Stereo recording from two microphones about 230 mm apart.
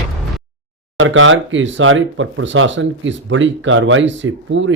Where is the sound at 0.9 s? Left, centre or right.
Right.